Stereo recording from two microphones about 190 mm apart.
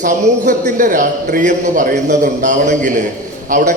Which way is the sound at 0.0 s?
40° right (ahead or behind).